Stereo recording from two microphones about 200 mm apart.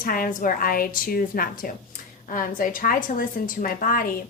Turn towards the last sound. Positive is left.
turn(degrees=45)  # may be behind; listen again after turning